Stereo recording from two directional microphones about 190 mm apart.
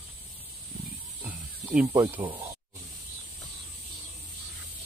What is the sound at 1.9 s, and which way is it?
Speech, 20° right (ahead or behind).